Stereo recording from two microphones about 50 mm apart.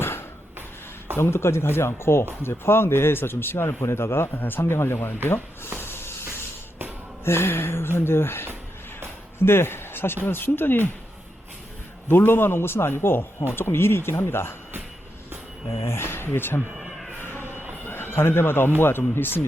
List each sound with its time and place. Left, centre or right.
0.0 s a sound: left
1.1 s speech: left
4.4 s speech: left
5.8 s a sound: left
7.3 s speech: left
12.0 s speech: left
15.9 s speech: left
17.2 s a sound: left
17.8 s speech: left